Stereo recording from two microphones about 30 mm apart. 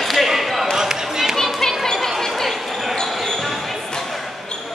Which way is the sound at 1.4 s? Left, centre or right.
Centre.